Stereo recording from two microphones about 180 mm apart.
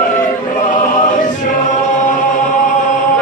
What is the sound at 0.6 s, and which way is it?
Choir, 45° left (ahead or behind).